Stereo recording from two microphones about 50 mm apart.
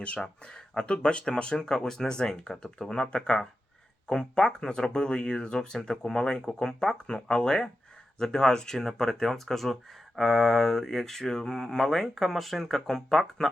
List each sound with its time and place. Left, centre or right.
0.0 s speech: left
2.9 s speech: left